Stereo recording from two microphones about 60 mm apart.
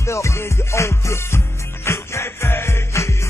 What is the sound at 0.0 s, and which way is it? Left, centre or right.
Music, left.